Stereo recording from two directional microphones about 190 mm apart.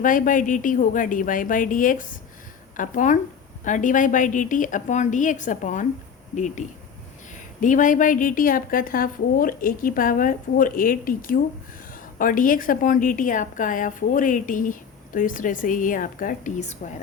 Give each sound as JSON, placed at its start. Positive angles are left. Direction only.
{"t": 0.0, "sound": "a woman's voice", "side_deg": 45}